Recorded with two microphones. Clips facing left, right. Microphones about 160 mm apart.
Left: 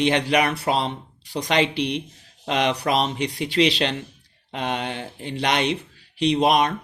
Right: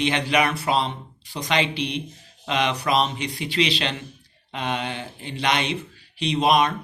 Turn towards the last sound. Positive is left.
turn(degrees=45)  # may be behind; listen again after turning